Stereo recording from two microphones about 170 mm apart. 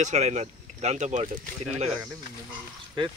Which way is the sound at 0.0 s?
40° right (ahead or behind).